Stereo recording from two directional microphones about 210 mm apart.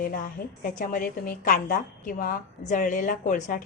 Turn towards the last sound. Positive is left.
turn(degrees=35)  # may be behind; listen again after turning